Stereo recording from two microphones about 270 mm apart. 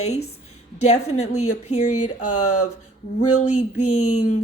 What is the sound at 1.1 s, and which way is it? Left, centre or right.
Speech, left.